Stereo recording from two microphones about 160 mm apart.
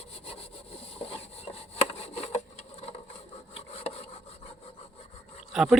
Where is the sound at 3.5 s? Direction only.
40° left (ahead or behind).